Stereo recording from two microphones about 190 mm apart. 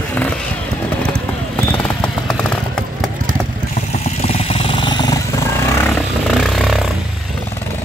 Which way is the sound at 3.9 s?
35° left (ahead or behind).